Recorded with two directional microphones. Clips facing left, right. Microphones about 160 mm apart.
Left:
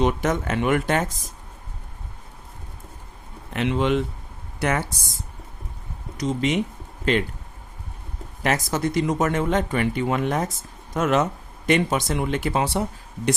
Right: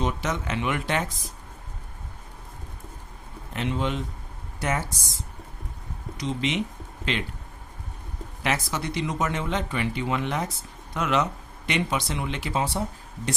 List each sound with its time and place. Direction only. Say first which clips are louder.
0.0 s speech: left 6 dB; 55° left (ahead or behind)
3.5 s speech: left 6 dB; 75° left (ahead or behind)
6.1 s speech: left 5 dB; 45° left (ahead or behind)
8.4 s speech: left 5 dB; 45° left (ahead or behind)